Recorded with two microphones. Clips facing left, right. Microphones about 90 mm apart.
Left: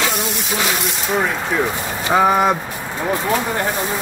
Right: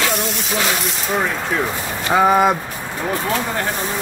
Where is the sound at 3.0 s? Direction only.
15° left (ahead or behind).